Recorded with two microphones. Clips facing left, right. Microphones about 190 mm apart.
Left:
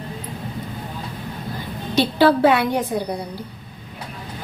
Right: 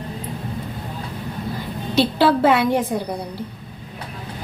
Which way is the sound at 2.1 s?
5° right (ahead or behind).